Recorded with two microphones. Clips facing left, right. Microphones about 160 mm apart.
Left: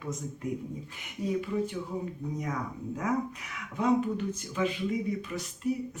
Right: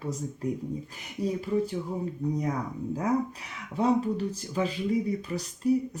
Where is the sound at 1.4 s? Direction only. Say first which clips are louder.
Right 3 dB; 35° right (ahead or behind).